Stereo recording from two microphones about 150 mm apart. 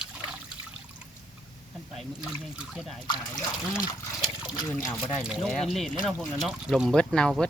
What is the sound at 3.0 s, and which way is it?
Speech, 25° left (ahead or behind).